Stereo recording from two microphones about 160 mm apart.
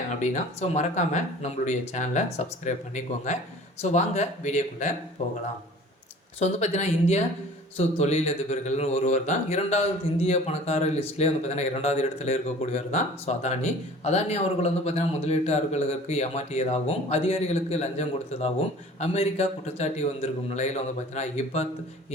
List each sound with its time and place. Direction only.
0.1 s speech: 50° left (ahead or behind)
6.4 s speech: 45° left (ahead or behind)